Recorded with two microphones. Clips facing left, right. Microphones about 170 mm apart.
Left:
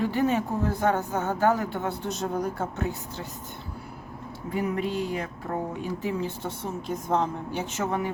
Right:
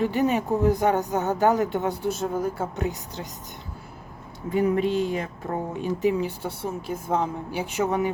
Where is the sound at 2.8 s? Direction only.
15° right (ahead or behind).